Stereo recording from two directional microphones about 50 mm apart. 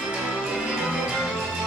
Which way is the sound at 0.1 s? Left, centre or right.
Centre.